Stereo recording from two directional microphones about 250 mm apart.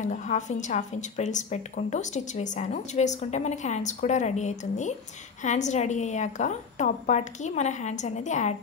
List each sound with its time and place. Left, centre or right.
0.0 s a woman's voice: left